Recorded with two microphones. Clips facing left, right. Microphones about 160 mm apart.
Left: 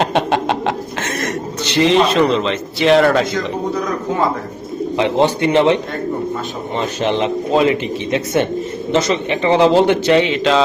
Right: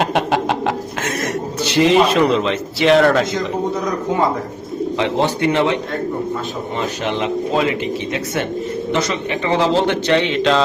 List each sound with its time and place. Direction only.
0.0 s a man's voice: 5° right (ahead or behind)
1.7 s a man's voice: 5° right (ahead or behind)
4.9 s a man's voice: 20° left (ahead or behind)
7.0 s a man's voice: 25° left (ahead or behind); by 10.6 s centre (ahead or behind)